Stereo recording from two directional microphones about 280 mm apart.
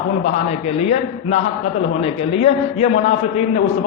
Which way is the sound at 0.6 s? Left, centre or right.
Left.